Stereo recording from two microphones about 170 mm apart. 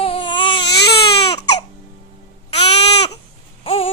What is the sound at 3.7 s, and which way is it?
Baby cry, 35° left (ahead or behind).